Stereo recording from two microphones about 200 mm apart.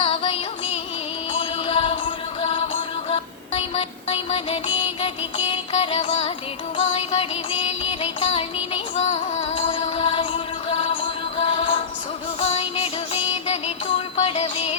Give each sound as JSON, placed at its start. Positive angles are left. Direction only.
{"t": 0.0, "sound": "music", "side_deg": 25}